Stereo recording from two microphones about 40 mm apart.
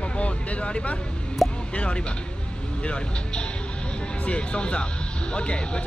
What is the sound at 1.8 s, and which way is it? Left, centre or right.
Speech, left.